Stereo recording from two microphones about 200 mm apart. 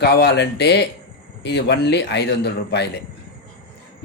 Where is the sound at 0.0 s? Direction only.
55° left (ahead or behind).